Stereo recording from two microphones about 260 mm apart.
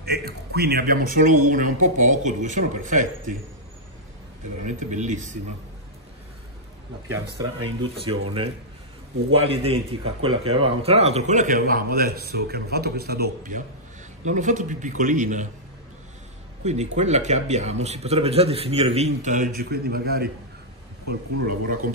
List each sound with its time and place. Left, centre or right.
0.0 s speech: right
4.6 s a man's voice: right
7.8 s a man's voice: right
9.3 s a man's voice: right
16.6 s a man's voice: right